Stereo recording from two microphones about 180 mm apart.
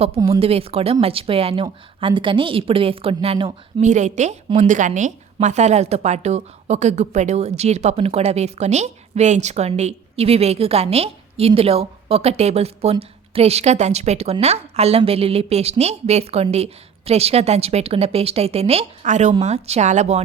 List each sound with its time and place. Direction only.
0.2 s a woman's voice: 30° right (ahead or behind)
3.8 s a woman's voice: 40° right (ahead or behind)